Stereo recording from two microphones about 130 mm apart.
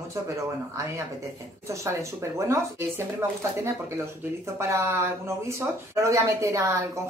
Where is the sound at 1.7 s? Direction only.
25° right (ahead or behind).